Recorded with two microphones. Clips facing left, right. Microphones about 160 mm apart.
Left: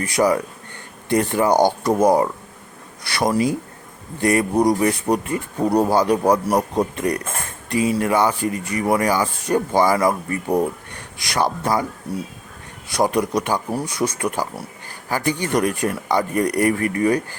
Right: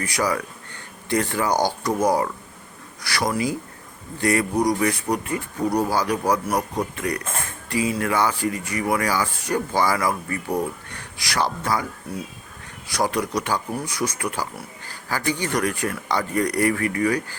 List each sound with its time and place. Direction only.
0.1 s speech: 25° left (ahead or behind)
12.9 s speech: 20° left (ahead or behind)
14.8 s a sound: 20° left (ahead or behind)
15.5 s speech: 20° left (ahead or behind)